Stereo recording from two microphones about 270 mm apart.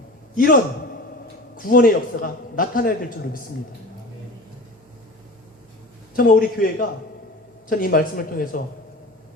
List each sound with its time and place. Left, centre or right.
0.3 s a man's voice: left
6.1 s a man's voice: left